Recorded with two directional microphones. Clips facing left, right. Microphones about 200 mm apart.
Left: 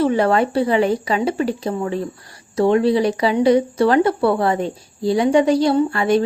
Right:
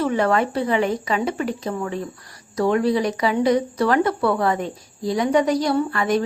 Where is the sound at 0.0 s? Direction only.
30° left (ahead or behind).